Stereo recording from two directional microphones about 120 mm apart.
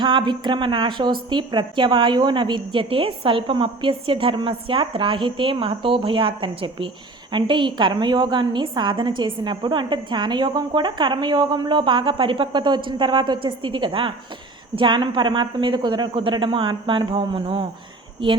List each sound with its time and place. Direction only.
0.0 s a woman's voice: 45° right (ahead or behind)